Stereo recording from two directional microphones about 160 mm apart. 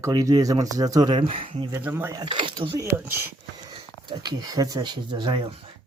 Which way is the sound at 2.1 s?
30° right (ahead or behind).